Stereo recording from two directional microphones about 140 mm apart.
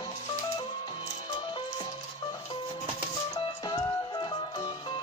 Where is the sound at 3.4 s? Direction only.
30° left (ahead or behind).